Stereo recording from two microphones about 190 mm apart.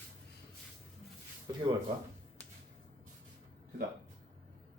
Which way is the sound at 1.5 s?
20° right (ahead or behind).